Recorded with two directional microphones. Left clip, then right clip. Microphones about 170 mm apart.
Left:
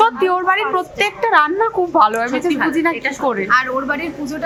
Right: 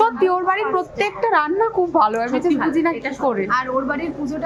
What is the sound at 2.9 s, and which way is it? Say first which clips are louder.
Speech: left 4 dB; 10° right (ahead or behind).